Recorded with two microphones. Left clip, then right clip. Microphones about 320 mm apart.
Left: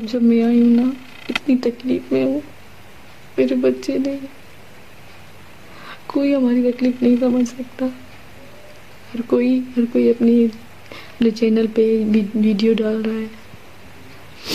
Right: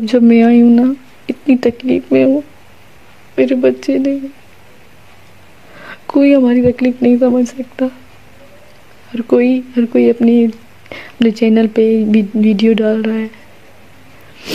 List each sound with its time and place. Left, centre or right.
0.0 s speech: right
3.3 s speech: right
5.8 s speech: right
9.1 s speech: right